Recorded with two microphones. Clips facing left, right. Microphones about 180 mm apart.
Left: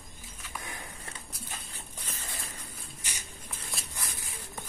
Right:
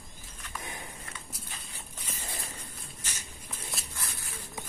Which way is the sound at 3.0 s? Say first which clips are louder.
Even; 15° left (ahead or behind).